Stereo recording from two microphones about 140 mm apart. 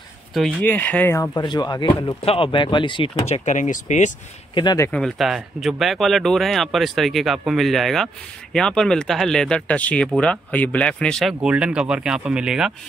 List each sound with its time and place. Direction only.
0.3 s speech: centre (ahead or behind)
1.3 s speech: 30° left (ahead or behind)
3.3 s speech: 55° left (ahead or behind)
4.9 s speech: centre (ahead or behind)
11.4 s speech: 5° right (ahead or behind)